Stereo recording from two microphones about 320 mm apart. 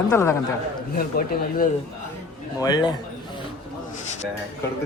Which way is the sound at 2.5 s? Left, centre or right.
Centre.